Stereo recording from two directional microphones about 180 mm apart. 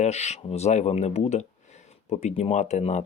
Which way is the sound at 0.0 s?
40° left (ahead or behind).